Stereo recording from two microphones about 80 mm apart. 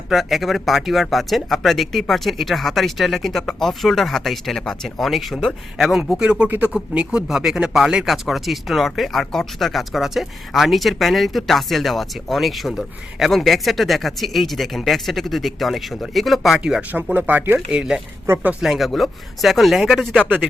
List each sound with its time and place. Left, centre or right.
0.1 s speech: centre
6.4 s speech: centre
16.9 s speech: right; by 20.1 s centre